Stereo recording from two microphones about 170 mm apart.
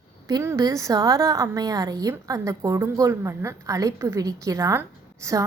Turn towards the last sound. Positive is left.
turn(degrees=-20)  # may be behind; listen again after turning